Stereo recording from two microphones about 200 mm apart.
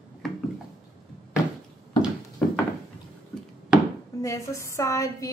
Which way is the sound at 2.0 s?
Centre (ahead or behind).